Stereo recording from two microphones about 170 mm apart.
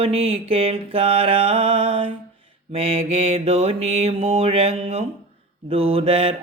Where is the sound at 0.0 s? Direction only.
35° right (ahead or behind).